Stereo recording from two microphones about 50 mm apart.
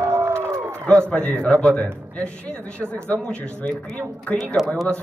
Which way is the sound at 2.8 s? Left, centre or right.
Centre.